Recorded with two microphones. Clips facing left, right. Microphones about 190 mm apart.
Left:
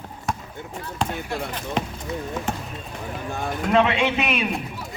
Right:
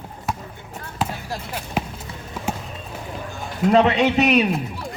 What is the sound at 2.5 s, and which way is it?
Run, 10° right (ahead or behind).